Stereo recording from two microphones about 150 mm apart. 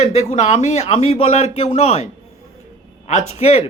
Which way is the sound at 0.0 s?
45° left (ahead or behind).